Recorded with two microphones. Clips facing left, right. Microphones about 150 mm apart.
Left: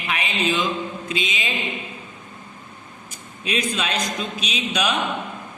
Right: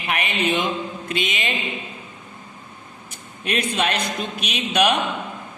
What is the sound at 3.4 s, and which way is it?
Speech, 60° right (ahead or behind).